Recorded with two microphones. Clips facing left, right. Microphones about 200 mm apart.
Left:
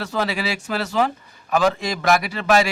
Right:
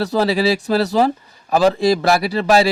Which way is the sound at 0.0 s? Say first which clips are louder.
Right 8 dB; 35° right (ahead or behind).